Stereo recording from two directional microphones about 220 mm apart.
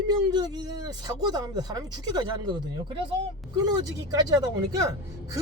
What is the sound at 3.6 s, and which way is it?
Speech, 15° right (ahead or behind).